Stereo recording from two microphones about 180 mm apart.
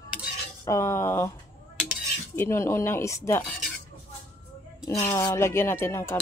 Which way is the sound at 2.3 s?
15° left (ahead or behind).